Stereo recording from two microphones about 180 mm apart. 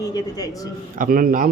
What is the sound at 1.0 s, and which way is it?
Speech, 50° right (ahead or behind).